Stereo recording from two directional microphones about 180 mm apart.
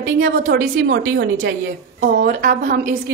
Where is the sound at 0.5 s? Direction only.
70° right (ahead or behind).